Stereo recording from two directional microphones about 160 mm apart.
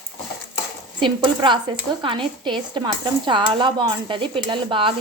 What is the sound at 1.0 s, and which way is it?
A woman's voice, 30° right (ahead or behind).